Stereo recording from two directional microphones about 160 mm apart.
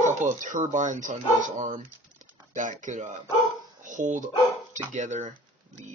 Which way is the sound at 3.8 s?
50° right (ahead or behind).